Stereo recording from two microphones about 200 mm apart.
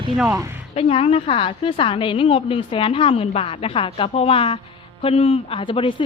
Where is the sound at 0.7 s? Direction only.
30° left (ahead or behind).